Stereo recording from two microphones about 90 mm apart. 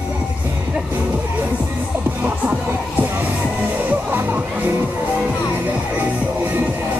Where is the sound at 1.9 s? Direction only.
15° right (ahead or behind).